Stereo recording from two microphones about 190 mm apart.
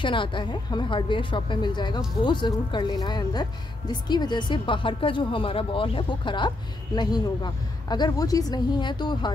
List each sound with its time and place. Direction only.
0.0 s speech: 25° left (ahead or behind)